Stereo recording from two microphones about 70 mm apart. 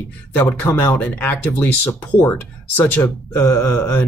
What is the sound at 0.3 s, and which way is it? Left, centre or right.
Speech, left.